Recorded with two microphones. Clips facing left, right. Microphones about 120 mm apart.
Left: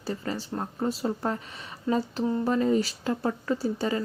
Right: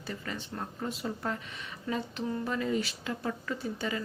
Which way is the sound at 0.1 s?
35° left (ahead or behind).